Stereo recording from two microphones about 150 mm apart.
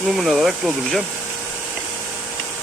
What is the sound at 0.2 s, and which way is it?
Speech, centre (ahead or behind).